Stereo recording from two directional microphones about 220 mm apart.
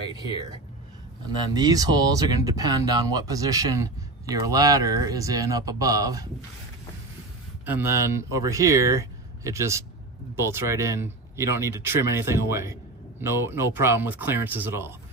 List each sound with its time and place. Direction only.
0.1 s speech: 20° right (ahead or behind)
7.6 s speech: 10° right (ahead or behind)